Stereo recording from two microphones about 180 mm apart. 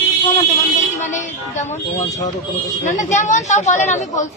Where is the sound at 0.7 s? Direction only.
40° left (ahead or behind).